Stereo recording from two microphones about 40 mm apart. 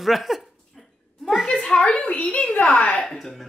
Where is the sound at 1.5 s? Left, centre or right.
Left.